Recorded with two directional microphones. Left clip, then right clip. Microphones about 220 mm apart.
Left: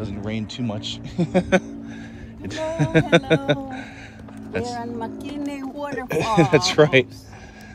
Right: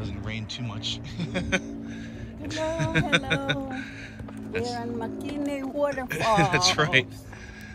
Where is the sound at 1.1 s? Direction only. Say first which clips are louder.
Left 11 dB; 15° left (ahead or behind).